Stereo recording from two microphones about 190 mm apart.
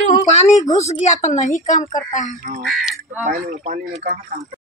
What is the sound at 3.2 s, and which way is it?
Speech, 45° right (ahead or behind).